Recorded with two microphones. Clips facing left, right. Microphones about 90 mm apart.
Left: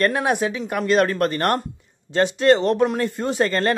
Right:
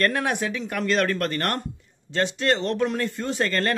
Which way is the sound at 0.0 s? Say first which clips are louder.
Left 4 dB; 15° left (ahead or behind).